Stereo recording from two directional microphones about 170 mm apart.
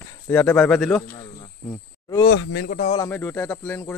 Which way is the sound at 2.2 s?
90° left.